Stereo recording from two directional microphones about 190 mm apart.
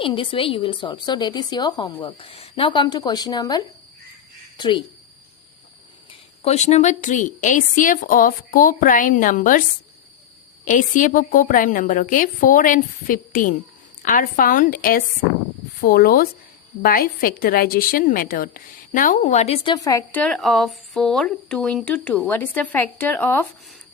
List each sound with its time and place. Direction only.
0.0 s a woman's voice: 25° left (ahead or behind)
6.1 s a woman's voice: 35° left (ahead or behind)
10.7 s a woman's voice: 40° left (ahead or behind); by 23.5 s 10° left (ahead or behind)